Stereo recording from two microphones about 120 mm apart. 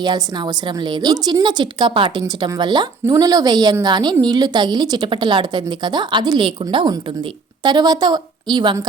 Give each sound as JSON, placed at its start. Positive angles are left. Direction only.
{"t": 0.0, "sound": "speech", "side_deg": -35}